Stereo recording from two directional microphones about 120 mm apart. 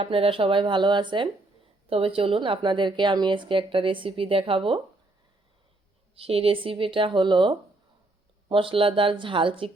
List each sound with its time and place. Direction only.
0.0 s speech: 50° right (ahead or behind)
6.1 s speech: 50° right (ahead or behind)